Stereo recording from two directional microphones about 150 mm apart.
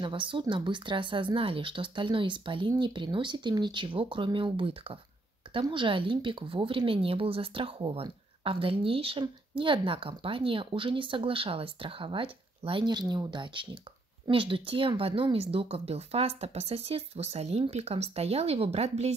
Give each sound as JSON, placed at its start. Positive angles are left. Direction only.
{"t": 0.0, "sound": "a woman's voice", "side_deg": -35}